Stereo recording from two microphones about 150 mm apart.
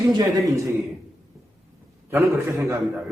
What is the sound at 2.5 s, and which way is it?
Speech, 20° right (ahead or behind).